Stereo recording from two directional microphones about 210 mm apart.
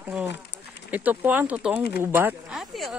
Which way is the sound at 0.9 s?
10° right (ahead or behind).